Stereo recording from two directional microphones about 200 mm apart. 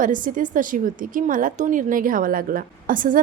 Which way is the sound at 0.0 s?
40° right (ahead or behind).